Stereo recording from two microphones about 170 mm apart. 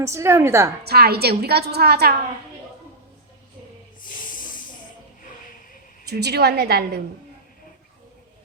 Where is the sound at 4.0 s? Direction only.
55° left (ahead or behind).